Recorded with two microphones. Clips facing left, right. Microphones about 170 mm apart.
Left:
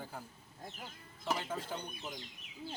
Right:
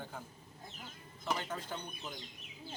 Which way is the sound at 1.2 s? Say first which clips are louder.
Left 1 dB; 5° left (ahead or behind).